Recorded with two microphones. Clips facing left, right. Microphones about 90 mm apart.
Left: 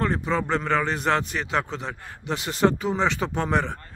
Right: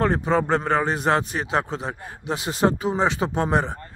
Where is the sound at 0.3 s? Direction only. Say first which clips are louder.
Right 2 dB; 45° right (ahead or behind).